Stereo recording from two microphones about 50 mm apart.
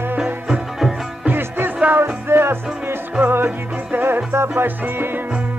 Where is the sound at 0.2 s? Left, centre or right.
Centre.